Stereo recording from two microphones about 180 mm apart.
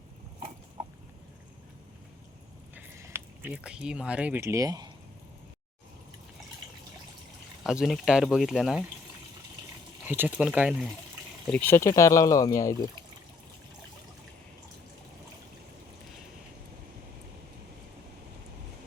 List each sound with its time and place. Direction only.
2.7 s speech: 10° right (ahead or behind)
7.6 s speech: centre (ahead or behind)
10.1 s speech: 10° right (ahead or behind)
11.5 s speech: 10° left (ahead or behind)